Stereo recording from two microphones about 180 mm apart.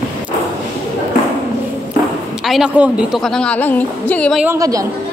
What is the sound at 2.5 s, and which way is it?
A woman's voice, 5° right (ahead or behind).